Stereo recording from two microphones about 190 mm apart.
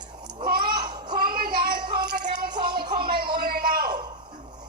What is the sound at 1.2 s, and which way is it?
Child singing, 50° right (ahead or behind).